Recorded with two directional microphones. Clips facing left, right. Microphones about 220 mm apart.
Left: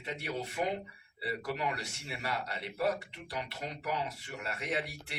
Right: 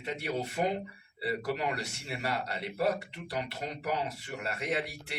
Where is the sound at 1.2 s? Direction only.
40° right (ahead or behind).